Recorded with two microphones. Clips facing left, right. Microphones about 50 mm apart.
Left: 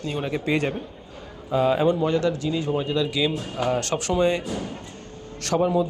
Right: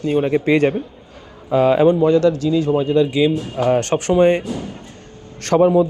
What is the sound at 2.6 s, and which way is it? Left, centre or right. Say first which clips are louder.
Speech: right 7 dB; right.